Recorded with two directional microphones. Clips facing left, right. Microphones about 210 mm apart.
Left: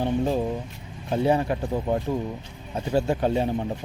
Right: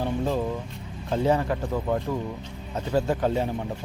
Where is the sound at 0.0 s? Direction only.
20° left (ahead or behind).